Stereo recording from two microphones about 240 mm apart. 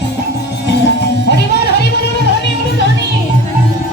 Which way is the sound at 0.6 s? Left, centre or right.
Left.